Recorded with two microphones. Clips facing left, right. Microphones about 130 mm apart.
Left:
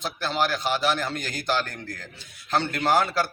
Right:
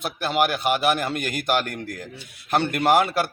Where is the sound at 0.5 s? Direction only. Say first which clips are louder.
Right 3 dB; 60° right (ahead or behind).